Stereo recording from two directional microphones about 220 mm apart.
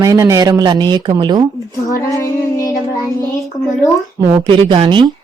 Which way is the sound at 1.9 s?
15° left (ahead or behind).